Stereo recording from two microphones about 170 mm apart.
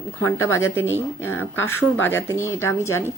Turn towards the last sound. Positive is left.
turn(degrees=15)  # may be behind; listen again after turning